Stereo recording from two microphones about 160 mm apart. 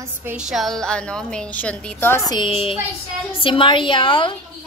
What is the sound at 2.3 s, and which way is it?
Speech, 30° left (ahead or behind).